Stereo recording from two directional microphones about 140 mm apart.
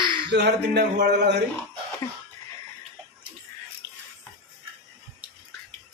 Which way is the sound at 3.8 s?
20° right (ahead or behind).